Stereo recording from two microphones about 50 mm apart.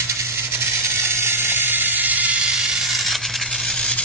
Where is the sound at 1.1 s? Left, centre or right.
Right.